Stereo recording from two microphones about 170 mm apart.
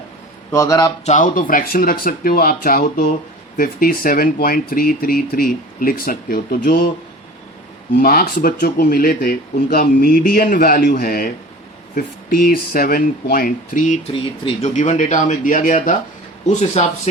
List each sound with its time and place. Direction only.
0.5 s a man's voice: 20° left (ahead or behind)
1.0 s speech: 50° left (ahead or behind)
8.0 s speech: 60° left (ahead or behind)
14.1 s speech: 30° left (ahead or behind)
14.8 s speech: 45° left (ahead or behind)